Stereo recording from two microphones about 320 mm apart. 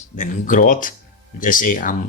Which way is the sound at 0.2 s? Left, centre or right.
Left.